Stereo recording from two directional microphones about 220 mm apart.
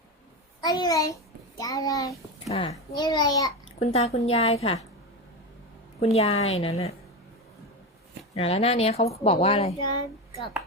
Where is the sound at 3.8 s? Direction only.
30° left (ahead or behind).